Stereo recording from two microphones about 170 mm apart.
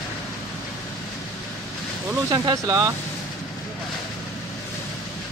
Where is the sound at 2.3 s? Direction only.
20° right (ahead or behind).